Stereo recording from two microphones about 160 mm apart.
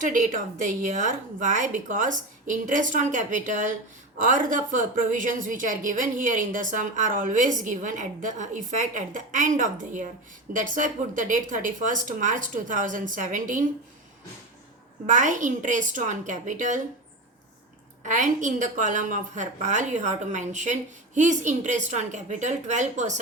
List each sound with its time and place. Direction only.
0.0 s a woman's voice: 55° right (ahead or behind)
15.0 s a woman's voice: 50° right (ahead or behind)
18.0 s a woman's voice: 50° right (ahead or behind)